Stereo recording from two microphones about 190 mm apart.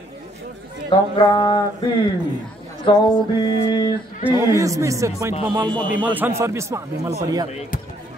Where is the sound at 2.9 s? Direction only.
25° left (ahead or behind).